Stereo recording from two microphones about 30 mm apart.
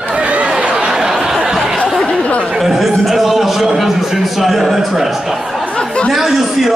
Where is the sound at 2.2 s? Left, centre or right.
Left.